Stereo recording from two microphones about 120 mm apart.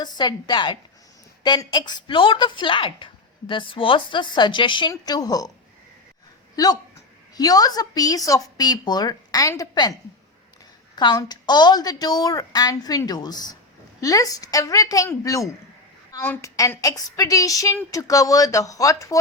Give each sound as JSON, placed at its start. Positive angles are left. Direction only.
{"t": 0.0, "sound": "a woman's voice", "side_deg": 35}
{"t": 7.3, "sound": "a woman's voice", "side_deg": 30}
{"t": 16.2, "sound": "a woman's voice", "side_deg": 15}
{"t": 16.6, "sound": "a woman's voice", "side_deg": 30}